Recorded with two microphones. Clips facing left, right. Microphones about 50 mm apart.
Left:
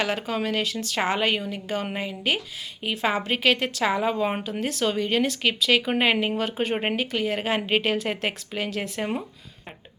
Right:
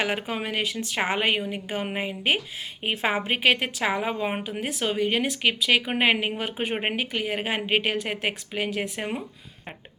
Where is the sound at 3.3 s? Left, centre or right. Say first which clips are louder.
Even; right.